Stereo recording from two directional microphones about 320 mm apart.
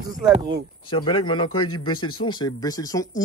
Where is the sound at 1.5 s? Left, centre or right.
Left.